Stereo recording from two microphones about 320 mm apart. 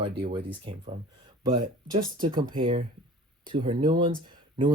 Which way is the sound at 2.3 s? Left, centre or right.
Right.